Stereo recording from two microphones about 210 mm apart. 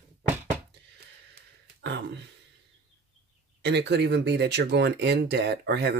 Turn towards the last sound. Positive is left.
turn(degrees=-55)  # may be behind; listen again after turning